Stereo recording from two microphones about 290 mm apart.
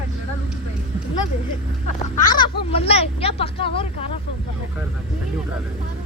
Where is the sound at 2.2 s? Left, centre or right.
Centre.